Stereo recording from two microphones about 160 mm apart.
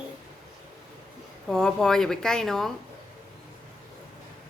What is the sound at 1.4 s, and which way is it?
Speech, 5° left (ahead or behind).